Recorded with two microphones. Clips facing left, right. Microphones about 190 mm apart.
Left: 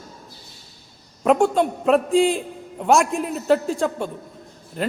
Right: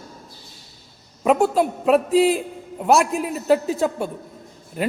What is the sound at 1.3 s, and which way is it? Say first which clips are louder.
A man's voice: even; 5° right (ahead or behind).